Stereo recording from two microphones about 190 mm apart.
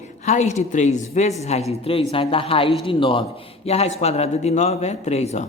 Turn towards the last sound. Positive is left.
turn(degrees=35)  # may be behind; listen again after turning